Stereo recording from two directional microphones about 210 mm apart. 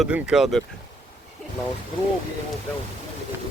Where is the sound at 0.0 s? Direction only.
5° right (ahead or behind).